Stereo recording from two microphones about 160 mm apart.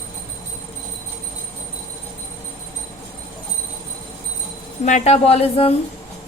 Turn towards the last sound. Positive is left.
turn(degrees=40)  # may be behind; listen again after turning